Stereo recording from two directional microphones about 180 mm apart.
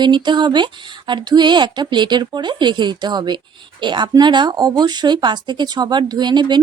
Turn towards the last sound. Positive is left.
turn(degrees=-25)  # may be behind; listen again after turning